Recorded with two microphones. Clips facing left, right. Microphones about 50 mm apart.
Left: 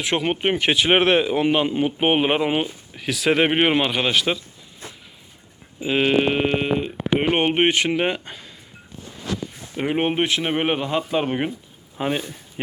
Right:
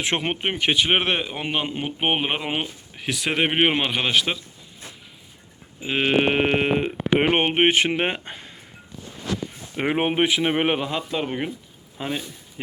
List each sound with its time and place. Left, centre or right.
0.0 s speech: right
0.4 s speech: centre
5.8 s speech: centre
6.2 s speech: right
7.3 s speech: centre
9.7 s speech: right
10.0 s speech: centre
11.1 s speech: centre